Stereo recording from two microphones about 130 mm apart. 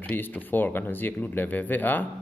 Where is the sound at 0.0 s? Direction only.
15° left (ahead or behind).